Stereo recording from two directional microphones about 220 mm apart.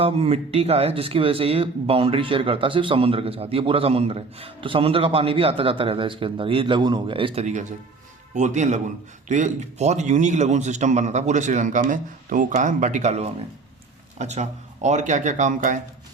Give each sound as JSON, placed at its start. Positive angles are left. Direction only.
{"t": 0.0, "sound": "a man's voice", "side_deg": -25}